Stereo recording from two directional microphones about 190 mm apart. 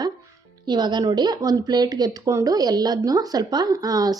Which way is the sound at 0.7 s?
20° right (ahead or behind).